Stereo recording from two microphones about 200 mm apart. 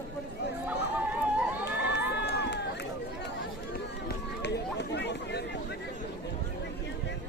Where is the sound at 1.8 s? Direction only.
55° left (ahead or behind).